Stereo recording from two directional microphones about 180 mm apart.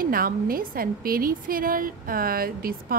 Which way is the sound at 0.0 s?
55° right (ahead or behind).